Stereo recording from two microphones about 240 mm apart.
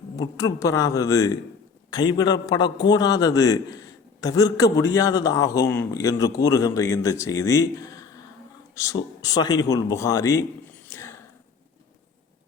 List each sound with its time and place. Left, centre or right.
0.2 s a man's voice: centre
10.8 s whispering: centre